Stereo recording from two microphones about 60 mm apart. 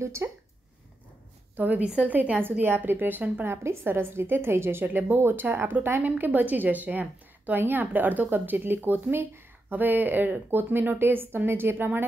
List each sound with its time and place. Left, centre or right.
0.0 s speech: right
1.6 s a woman's voice: right
2.6 s a woman's voice: right
3.6 s a woman's voice: right